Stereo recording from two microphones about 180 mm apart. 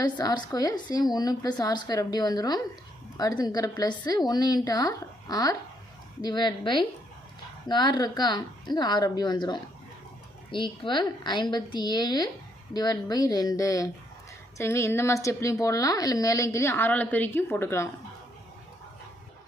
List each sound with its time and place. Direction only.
0.0 s a woman's voice: 25° left (ahead or behind)